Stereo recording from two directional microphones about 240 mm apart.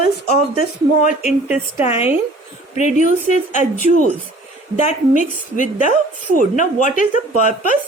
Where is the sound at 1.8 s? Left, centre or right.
Left.